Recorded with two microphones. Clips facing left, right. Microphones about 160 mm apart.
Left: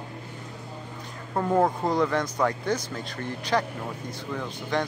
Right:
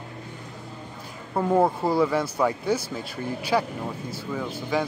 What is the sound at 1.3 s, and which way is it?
Speech, 5° right (ahead or behind).